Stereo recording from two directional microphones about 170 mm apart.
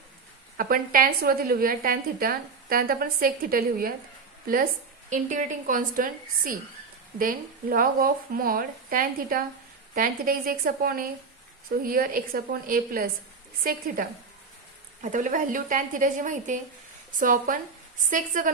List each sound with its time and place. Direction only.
0.5 s a woman's voice: 55° right (ahead or behind)